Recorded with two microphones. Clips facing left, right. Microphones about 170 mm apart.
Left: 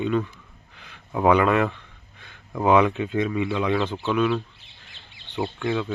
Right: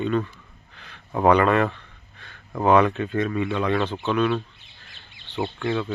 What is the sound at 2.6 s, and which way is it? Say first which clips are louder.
Speech: even; 15° left (ahead or behind).